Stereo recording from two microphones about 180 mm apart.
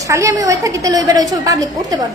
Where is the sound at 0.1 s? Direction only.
15° right (ahead or behind).